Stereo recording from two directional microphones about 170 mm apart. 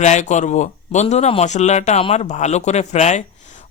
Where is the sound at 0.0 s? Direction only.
45° left (ahead or behind).